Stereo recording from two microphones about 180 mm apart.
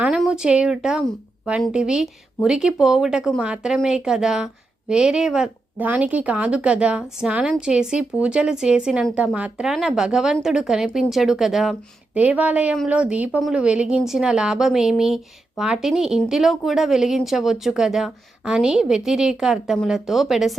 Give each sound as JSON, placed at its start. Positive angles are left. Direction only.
{"t": 0.0, "sound": "a woman's voice", "side_deg": -5}